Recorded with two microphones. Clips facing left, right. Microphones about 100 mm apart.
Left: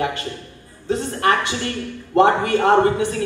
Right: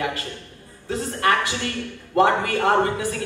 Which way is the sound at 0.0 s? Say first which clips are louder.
Left 3 dB; 25° left (ahead or behind).